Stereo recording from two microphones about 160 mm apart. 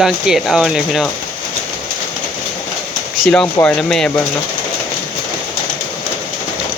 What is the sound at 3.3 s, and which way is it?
Speech, 5° left (ahead or behind).